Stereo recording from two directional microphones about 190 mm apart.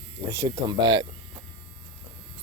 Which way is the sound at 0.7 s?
25° right (ahead or behind).